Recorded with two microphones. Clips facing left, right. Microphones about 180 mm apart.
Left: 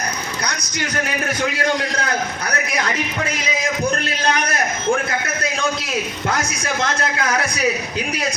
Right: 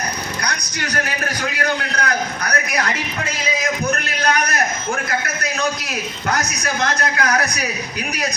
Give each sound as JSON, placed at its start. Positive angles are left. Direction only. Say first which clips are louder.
{"t": 1.5, "sound": "a man's voice", "louder": "left 1 dB", "side_deg": 25}
{"t": 4.2, "sound": "a sound", "louder": "right 2 dB", "side_deg": 25}
{"t": 6.3, "sound": "a man's voice", "louder": "right 1 dB", "side_deg": 25}